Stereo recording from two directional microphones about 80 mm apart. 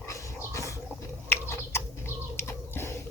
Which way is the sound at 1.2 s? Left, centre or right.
Left.